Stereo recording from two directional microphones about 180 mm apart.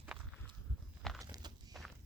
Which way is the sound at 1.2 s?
20° right (ahead or behind).